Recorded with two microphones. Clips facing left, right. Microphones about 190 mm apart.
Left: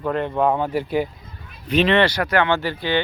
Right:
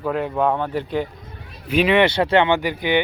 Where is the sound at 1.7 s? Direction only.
10° right (ahead or behind).